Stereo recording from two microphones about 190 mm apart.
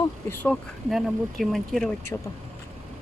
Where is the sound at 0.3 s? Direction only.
10° left (ahead or behind).